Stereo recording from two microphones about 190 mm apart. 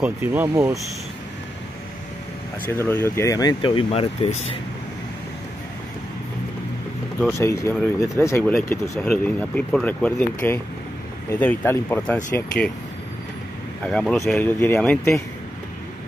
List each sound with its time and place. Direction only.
0.0 s speech: 10° right (ahead or behind)
2.7 s speech: 10° left (ahead or behind); by 4.6 s 30° left (ahead or behind)
7.3 s speech: 15° left (ahead or behind)
13.8 s speech: centre (ahead or behind)